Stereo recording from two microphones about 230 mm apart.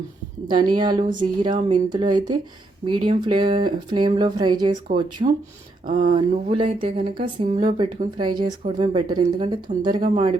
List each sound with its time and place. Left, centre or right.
0.4 s speech: centre
5.8 s speech: right
6.1 s speech: right